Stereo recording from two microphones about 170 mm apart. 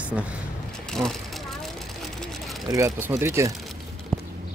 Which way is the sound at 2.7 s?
20° right (ahead or behind).